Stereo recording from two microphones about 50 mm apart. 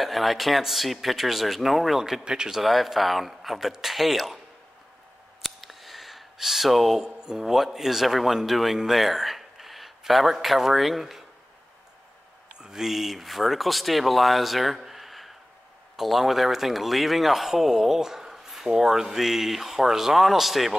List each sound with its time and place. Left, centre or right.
0.0 s a man's voice: centre
2.2 s speech: centre
2.6 s a man's voice: centre
5.4 s a sound: centre
7.1 s speech: centre
12.5 s a man's voice: centre